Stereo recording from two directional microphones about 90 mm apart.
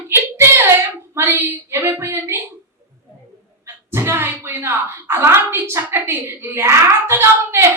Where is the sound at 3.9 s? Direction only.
25° right (ahead or behind).